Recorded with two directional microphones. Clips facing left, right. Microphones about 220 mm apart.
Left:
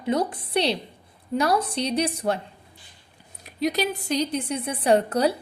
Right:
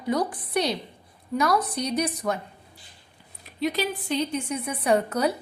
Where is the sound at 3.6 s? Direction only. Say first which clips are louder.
Left 2 dB; 45° left (ahead or behind).